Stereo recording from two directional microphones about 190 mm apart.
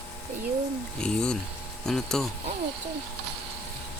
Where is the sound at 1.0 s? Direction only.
5° left (ahead or behind).